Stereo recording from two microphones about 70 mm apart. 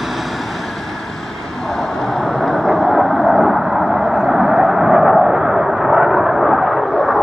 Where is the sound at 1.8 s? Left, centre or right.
Centre.